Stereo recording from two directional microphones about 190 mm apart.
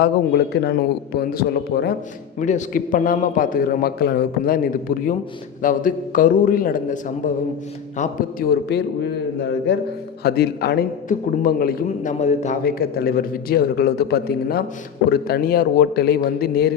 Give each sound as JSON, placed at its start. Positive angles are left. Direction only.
{"t": 0.0, "sound": "a man's voice", "side_deg": 60}
{"t": 2.4, "sound": "a man's voice", "side_deg": 40}
{"t": 9.4, "sound": "a man's voice", "side_deg": 65}
{"t": 12.6, "sound": "a man's voice", "side_deg": 55}